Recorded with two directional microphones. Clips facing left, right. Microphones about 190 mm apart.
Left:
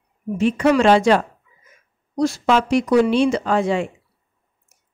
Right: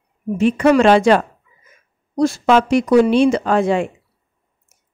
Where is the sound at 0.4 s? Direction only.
55° right (ahead or behind).